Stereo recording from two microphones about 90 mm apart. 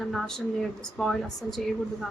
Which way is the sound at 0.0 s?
5° left (ahead or behind).